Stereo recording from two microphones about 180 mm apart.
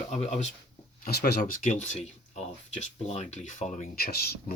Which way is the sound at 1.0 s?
55° left (ahead or behind).